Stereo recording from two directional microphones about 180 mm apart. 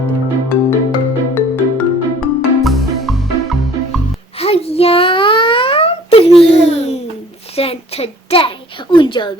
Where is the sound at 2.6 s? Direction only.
Centre (ahead or behind).